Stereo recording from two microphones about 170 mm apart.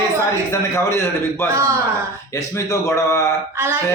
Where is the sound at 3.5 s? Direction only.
15° right (ahead or behind).